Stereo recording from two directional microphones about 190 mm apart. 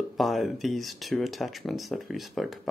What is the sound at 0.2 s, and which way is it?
Speech, centre (ahead or behind).